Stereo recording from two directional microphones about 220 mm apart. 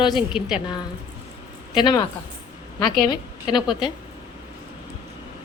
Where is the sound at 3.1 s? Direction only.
20° left (ahead or behind).